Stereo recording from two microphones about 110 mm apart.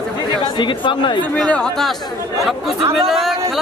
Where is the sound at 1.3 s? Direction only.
10° left (ahead or behind).